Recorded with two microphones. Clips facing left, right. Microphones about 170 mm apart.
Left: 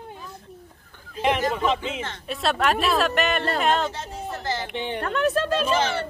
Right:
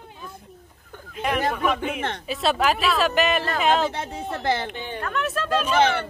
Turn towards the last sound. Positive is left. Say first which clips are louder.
# right 3 dB
turn(degrees=-60)  # may be behind; listen again after turning